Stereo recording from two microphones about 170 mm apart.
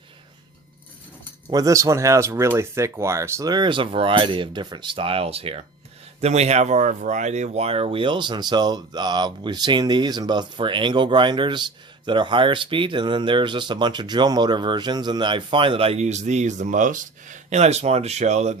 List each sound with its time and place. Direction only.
1.5 s speech: 20° right (ahead or behind); by 18.5 s 40° right (ahead or behind)